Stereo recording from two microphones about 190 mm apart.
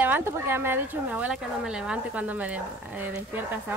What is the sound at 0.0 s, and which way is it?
Speech, 10° right (ahead or behind).